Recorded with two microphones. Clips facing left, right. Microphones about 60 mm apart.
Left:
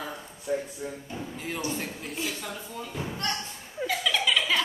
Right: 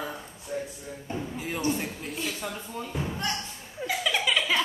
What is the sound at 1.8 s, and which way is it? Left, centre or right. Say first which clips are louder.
Speech: even; centre.